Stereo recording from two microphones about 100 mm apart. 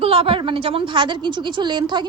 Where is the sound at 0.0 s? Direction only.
70° right (ahead or behind).